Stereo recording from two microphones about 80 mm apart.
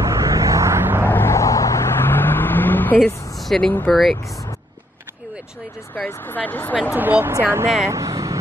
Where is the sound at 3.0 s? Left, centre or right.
Centre.